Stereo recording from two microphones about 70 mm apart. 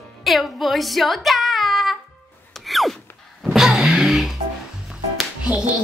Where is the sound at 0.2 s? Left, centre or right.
Centre.